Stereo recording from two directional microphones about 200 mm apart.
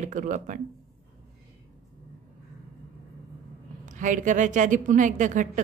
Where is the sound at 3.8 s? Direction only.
40° right (ahead or behind).